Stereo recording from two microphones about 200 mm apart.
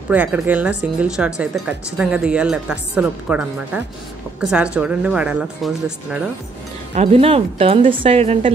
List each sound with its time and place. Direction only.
0.1 s speech: 10° right (ahead or behind)
6.9 s a woman's voice: 30° right (ahead or behind)